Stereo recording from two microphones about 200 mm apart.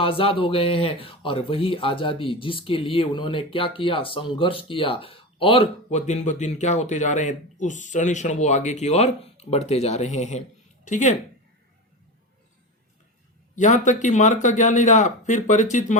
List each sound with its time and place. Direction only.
0.0 s a man's voice: 25° left (ahead or behind)
13.6 s a man's voice: 40° left (ahead or behind)